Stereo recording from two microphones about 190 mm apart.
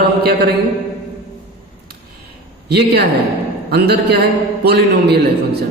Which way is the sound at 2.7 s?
60° right (ahead or behind).